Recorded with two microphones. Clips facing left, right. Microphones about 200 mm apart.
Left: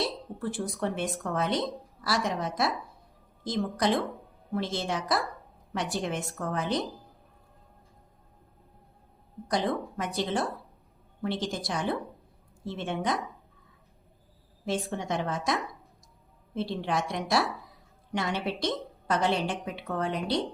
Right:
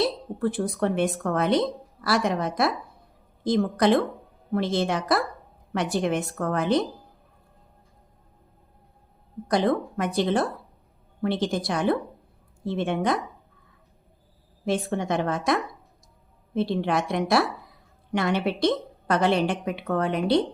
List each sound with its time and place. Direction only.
0.4 s a woman's voice: 60° right (ahead or behind)
9.5 s a woman's voice: 60° right (ahead or behind)
14.6 s a woman's voice: 55° right (ahead or behind)
16.6 s a woman's voice: 60° right (ahead or behind)